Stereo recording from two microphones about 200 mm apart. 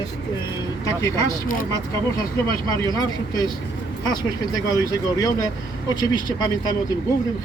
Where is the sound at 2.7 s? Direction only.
20° left (ahead or behind).